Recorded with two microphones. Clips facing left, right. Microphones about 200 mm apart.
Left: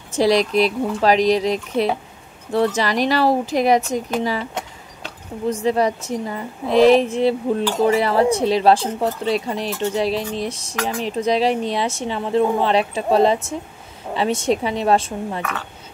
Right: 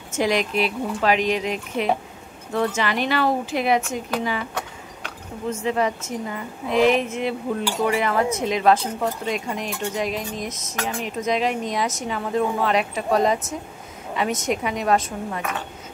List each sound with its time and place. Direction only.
0.1 s a woman's voice: 35° left (ahead or behind)